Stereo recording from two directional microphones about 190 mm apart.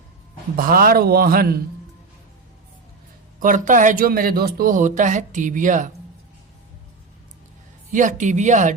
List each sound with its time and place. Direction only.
0.5 s speech: 50° right (ahead or behind)
3.4 s speech: 45° right (ahead or behind)
7.9 s speech: 40° right (ahead or behind)